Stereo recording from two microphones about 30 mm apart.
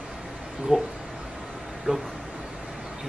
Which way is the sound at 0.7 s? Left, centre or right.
Right.